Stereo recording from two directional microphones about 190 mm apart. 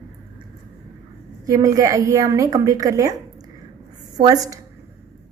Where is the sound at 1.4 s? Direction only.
15° right (ahead or behind).